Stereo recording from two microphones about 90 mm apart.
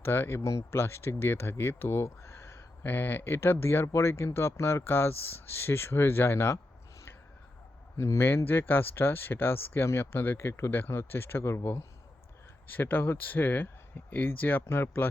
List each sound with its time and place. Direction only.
0.0 s speech: 25° left (ahead or behind)
7.9 s speech: 30° left (ahead or behind)